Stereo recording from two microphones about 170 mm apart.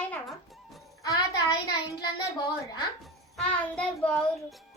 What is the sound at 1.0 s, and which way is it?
Speech, 20° left (ahead or behind).